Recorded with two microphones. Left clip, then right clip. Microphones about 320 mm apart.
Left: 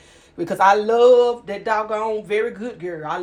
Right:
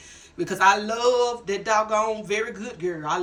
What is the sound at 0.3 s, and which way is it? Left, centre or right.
Speech, centre.